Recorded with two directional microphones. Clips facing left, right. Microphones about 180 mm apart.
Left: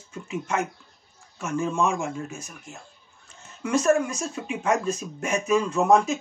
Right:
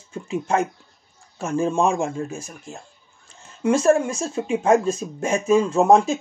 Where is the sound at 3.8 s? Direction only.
30° right (ahead or behind).